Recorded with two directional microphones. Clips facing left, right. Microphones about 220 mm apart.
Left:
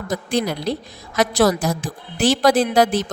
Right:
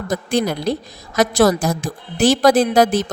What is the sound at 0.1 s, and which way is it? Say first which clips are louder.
A woman's voice: right 2 dB; 50° right (ahead or behind).